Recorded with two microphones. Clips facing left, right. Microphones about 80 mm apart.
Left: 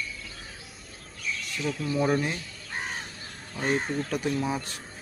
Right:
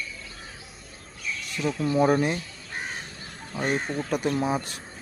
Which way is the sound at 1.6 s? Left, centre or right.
Right.